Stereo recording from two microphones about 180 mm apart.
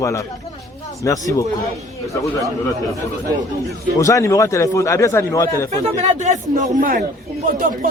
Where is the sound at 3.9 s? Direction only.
15° left (ahead or behind).